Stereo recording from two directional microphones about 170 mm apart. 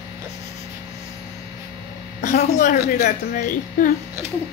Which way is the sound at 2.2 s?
50° left (ahead or behind).